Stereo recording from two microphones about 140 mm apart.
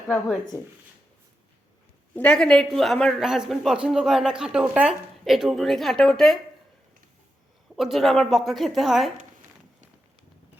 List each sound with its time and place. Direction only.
0.5 s speech: 20° right (ahead or behind)
2.1 s a man's voice: 5° left (ahead or behind)
7.8 s a man's voice: centre (ahead or behind)